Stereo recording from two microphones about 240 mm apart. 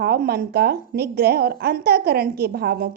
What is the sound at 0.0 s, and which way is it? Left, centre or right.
A woman's voice, right.